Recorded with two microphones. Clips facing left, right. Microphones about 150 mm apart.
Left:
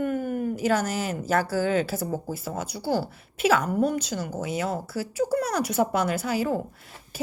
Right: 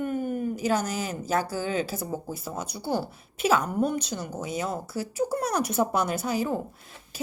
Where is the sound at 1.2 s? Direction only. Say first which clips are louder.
Left 4 dB; 15° right (ahead or behind).